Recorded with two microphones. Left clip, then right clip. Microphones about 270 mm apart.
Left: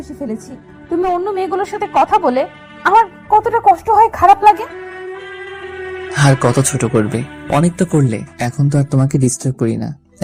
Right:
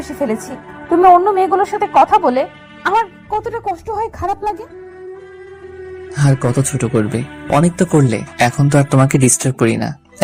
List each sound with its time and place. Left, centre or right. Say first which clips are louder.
0.1 s a woman's voice: right 7 dB; right
0.9 s speech: right 8 dB; right; by 2.9 s centre
2.9 s speech: left 7 dB; centre; by 4.7 s left
5.7 s speech: left 7 dB; left; by 9.9 s right